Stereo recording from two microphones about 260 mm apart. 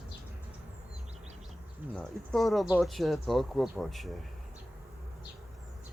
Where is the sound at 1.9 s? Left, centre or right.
Centre.